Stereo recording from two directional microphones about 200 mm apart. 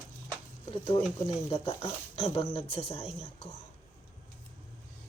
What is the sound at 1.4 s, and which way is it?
Speech, 30° left (ahead or behind).